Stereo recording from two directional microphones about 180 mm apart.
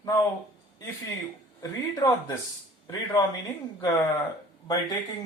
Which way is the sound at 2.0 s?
20° left (ahead or behind).